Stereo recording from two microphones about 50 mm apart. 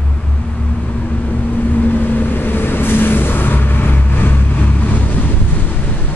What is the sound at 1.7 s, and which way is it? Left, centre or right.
Vehicle, left.